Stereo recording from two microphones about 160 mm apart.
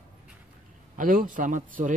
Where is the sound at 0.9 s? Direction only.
60° right (ahead or behind).